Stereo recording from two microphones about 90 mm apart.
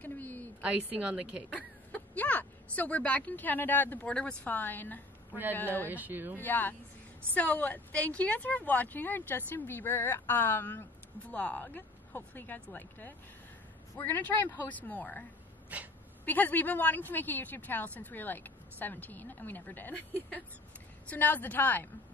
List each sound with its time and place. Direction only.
0.0 s a sound: 20° left (ahead or behind)
0.6 s speech: 15° right (ahead or behind)
1.5 s speech: 15° left (ahead or behind)
5.9 s speech: 20° right (ahead or behind)
6.3 s speech: 20° left (ahead or behind)
15.7 s speech: 15° right (ahead or behind)
16.3 s speech: 20° left (ahead or behind)